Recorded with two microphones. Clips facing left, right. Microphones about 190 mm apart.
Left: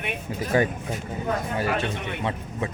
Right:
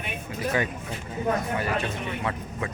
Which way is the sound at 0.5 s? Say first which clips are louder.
Left 6 dB; 40° left (ahead or behind).